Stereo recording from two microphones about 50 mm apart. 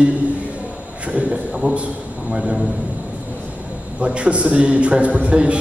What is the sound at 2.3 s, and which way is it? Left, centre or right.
Speech, centre.